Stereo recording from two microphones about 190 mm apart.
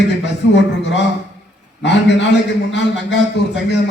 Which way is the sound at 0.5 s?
70° left (ahead or behind).